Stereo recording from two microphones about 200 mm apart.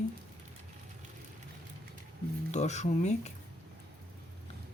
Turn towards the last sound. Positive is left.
turn(degrees=35)  # may be behind; listen again after turning